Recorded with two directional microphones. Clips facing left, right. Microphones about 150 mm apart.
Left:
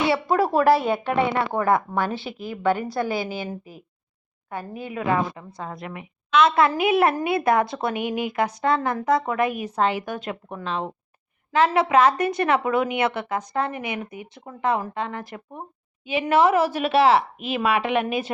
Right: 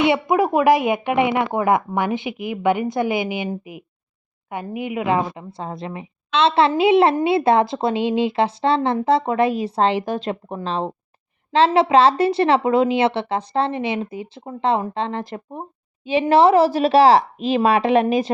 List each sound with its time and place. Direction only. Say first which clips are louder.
0.0 s a woman's voice: right 3 dB; 20° right (ahead or behind); by 18.3 s 35° right (ahead or behind)